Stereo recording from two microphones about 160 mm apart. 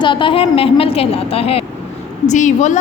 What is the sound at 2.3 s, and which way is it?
Speech, 50° left (ahead or behind).